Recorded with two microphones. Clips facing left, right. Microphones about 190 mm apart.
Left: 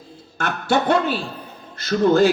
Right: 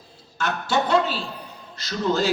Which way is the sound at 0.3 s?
55° left (ahead or behind).